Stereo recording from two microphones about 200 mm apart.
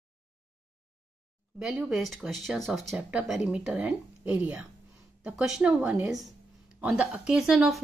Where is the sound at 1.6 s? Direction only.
Centre (ahead or behind).